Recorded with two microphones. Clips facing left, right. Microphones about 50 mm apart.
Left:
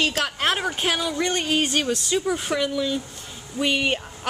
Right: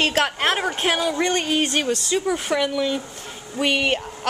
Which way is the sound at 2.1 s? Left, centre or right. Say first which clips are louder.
Right 2 dB; centre.